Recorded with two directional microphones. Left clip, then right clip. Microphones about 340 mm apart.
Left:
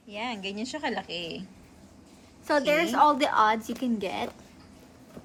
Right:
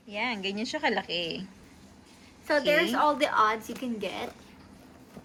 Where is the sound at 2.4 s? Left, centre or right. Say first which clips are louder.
Even; left.